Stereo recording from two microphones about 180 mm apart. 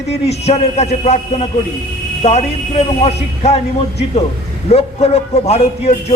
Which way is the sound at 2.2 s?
35° left (ahead or behind).